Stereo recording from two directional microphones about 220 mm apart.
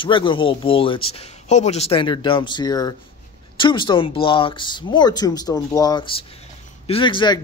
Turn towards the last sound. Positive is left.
turn(degrees=20)  # may be behind; listen again after turning